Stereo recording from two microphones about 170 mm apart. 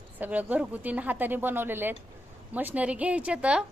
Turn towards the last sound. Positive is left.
turn(degrees=-5)  # may be behind; listen again after turning